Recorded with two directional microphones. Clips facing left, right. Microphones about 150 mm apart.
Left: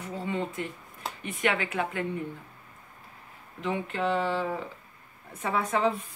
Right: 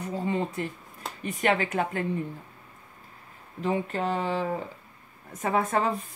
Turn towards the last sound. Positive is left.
turn(degrees=-45)  # may be behind; listen again after turning